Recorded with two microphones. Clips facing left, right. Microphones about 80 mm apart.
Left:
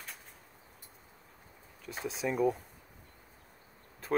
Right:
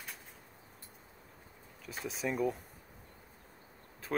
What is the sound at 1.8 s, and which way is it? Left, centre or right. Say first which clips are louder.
Speech: left 2 dB; centre.